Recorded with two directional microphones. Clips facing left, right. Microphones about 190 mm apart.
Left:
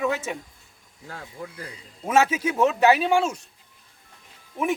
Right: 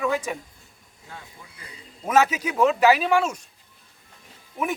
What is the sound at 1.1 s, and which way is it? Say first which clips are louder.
Speech: left 7 dB; 85° left.